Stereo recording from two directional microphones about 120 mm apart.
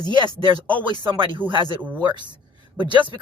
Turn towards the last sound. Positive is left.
turn(degrees=-40)  # may be behind; listen again after turning